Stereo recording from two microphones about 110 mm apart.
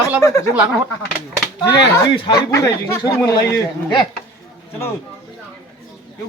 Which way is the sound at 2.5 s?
30° left (ahead or behind).